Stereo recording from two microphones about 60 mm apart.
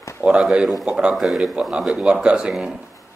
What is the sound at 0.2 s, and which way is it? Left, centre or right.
Speech, centre.